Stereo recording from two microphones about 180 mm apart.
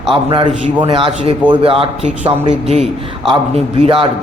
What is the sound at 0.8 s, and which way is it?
A man's voice, 30° right (ahead or behind).